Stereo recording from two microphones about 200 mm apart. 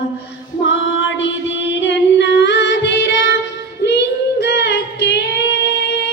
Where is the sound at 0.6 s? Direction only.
65° left (ahead or behind).